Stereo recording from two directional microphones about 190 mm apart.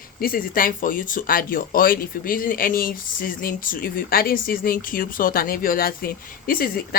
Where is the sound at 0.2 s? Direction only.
50° left (ahead or behind).